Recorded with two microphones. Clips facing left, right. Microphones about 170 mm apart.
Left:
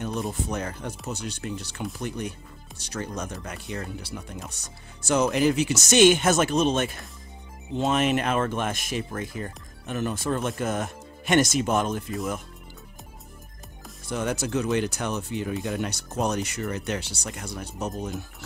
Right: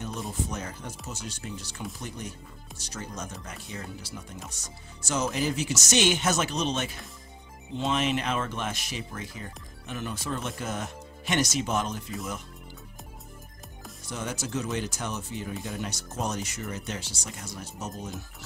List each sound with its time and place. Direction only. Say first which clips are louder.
0.0 s speech: left 4 dB; 60° left (ahead or behind)
14.0 s speech: left 7 dB; 60° left (ahead or behind)